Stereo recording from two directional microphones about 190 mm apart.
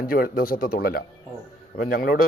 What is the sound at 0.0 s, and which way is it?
A man's voice, 50° left (ahead or behind).